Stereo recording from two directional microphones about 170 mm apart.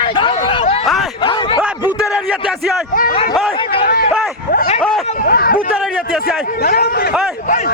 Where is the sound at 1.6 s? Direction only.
5° right (ahead or behind).